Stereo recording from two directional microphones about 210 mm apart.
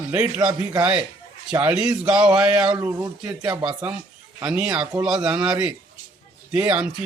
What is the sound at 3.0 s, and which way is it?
Speech, 20° right (ahead or behind).